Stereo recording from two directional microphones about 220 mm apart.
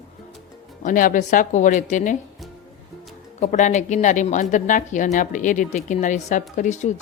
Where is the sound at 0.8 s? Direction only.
35° left (ahead or behind).